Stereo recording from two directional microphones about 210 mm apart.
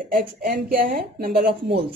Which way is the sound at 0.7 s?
45° right (ahead or behind).